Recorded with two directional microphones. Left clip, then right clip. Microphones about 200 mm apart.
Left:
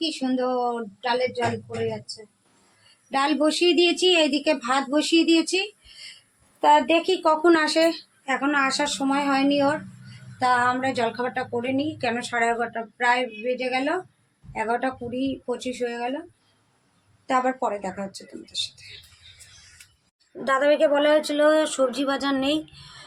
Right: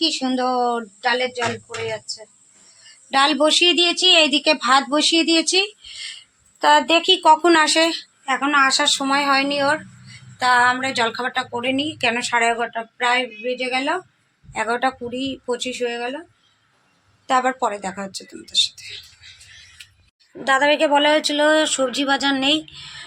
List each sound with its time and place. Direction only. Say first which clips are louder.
0.0 s speech: right 5 dB; 25° right (ahead or behind)
3.1 s a woman's voice: right 6 dB; 15° right (ahead or behind); by 4.2 s 5° left (ahead or behind)
4.3 s speech: right 7 dB; 20° right (ahead or behind)
6.6 s a woman's voice: right 3 dB; 5° right (ahead or behind)
17.2 s a woman's voice: right 4 dB; 15° right (ahead or behind)
20.4 s speech: right 3 dB; centre (ahead or behind)